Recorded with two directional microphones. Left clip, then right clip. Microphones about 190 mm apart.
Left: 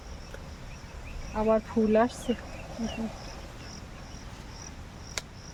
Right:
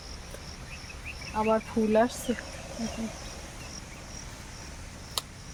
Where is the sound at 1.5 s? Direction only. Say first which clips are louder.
Left 2 dB; 20° left (ahead or behind).